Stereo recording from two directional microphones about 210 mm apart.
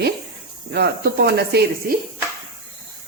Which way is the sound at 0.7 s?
50° right (ahead or behind).